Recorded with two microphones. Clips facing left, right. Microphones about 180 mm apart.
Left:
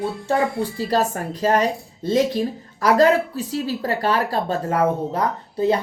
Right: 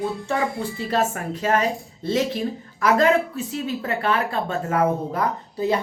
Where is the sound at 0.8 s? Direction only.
35° left (ahead or behind).